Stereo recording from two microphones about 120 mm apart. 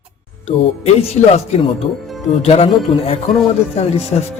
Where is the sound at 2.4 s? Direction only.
60° left (ahead or behind).